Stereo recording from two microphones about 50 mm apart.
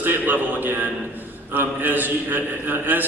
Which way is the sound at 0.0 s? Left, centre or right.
Right.